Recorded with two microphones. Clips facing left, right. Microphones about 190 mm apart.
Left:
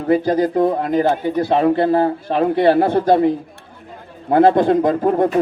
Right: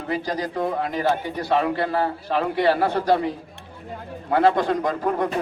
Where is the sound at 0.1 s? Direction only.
55° left (ahead or behind).